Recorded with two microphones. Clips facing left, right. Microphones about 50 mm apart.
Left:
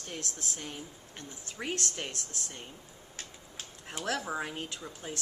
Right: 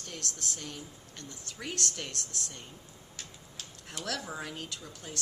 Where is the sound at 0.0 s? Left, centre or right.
Left.